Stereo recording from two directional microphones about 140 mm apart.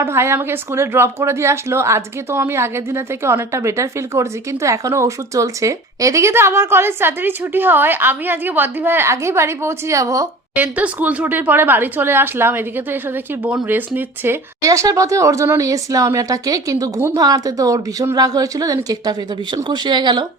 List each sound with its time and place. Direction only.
0.0 s a woman's voice: 20° right (ahead or behind)
10.5 s a woman's voice: 10° right (ahead or behind); by 20.2 s 30° right (ahead or behind)